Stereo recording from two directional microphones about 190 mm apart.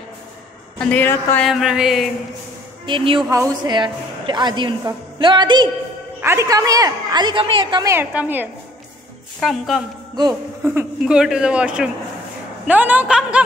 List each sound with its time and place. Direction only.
0.7 s a woman's voice: 10° left (ahead or behind)
1.5 s speech: centre (ahead or behind)
2.9 s a woman's voice: 25° right (ahead or behind); by 9.8 s centre (ahead or behind)
10.1 s a woman's voice: 20° right (ahead or behind)
10.7 s a woman's voice: 10° right (ahead or behind)